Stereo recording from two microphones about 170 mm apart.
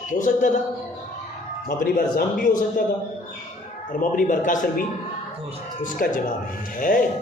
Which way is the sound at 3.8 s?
50° left (ahead or behind).